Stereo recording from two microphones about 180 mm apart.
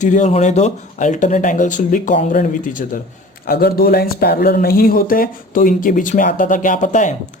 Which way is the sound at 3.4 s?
60° left (ahead or behind).